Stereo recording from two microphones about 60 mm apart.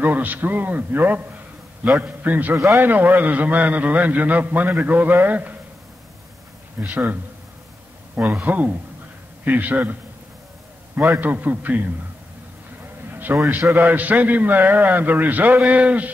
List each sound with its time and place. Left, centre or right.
0.0 s a man's voice: right
2.5 s a man's voice: right
2.8 s a man's voice: right
6.9 s a man's voice: right
8.5 s a man's voice: right
11.0 s a man's voice: right
13.1 s a sound: right
13.7 s a man's voice: right